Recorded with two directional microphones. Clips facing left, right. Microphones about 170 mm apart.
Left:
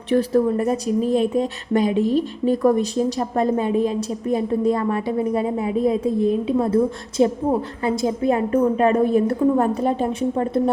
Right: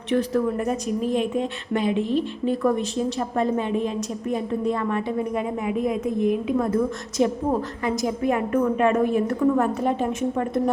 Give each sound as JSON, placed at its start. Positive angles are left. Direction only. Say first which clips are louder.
{"t": 0.1, "sound": "a woman's voice", "louder": "left 4 dB", "side_deg": 35}